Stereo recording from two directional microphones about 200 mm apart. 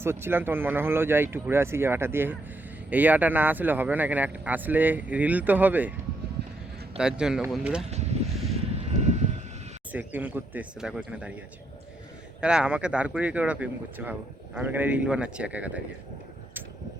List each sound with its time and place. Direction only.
0.0 s speech: 10° right (ahead or behind)
6.9 s a man's voice: 5° right (ahead or behind)
7.9 s vehicle: 35° right (ahead or behind)
9.9 s speech: 10° right (ahead or behind)
12.4 s speech: 5° right (ahead or behind)